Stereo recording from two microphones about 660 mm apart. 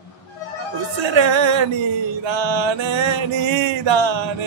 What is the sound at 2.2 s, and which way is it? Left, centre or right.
Speech, right.